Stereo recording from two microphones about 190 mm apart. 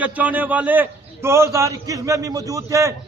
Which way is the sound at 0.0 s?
10° right (ahead or behind).